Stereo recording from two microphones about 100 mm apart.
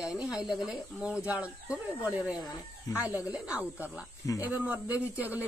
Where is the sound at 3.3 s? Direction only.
15° right (ahead or behind).